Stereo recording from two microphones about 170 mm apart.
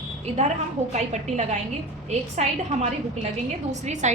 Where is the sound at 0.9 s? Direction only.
40° right (ahead or behind).